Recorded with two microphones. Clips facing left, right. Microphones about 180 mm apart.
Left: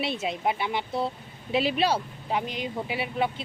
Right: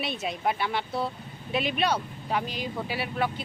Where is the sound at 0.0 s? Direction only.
25° left (ahead or behind).